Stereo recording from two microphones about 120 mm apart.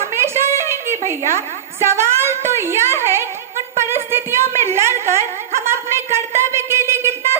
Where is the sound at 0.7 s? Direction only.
25° left (ahead or behind).